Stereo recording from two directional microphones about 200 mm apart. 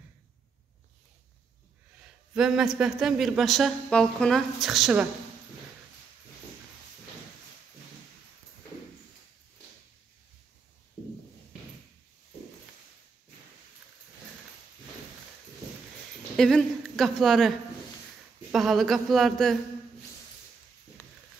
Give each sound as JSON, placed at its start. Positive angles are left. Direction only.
{"t": 2.0, "sound": "speech", "side_deg": -5}
{"t": 16.3, "sound": "a woman's voice", "side_deg": 0}
{"t": 21.0, "sound": "a sound", "side_deg": 10}